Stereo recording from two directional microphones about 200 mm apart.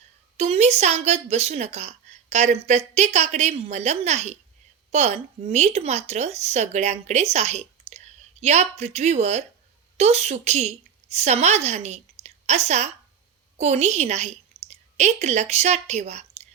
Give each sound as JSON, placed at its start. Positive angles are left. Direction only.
{"t": 0.3, "sound": "a woman's voice", "side_deg": -30}